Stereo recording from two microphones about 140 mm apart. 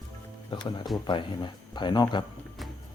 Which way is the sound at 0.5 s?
35° left (ahead or behind).